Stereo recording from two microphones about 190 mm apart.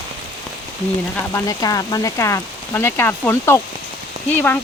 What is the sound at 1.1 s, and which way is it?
Speech, 15° left (ahead or behind).